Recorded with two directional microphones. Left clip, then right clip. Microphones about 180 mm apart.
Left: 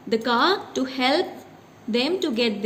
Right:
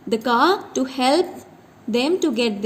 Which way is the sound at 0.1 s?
50° right (ahead or behind).